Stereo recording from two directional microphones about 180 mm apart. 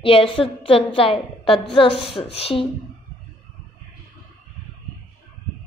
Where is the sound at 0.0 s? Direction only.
30° left (ahead or behind).